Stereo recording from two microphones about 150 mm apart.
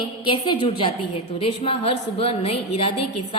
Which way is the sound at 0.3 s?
35° left (ahead or behind).